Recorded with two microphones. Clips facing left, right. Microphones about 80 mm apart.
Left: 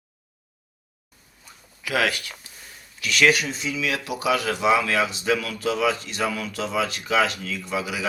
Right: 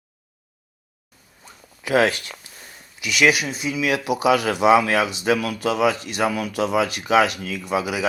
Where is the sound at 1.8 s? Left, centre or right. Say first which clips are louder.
Right 5 dB; right.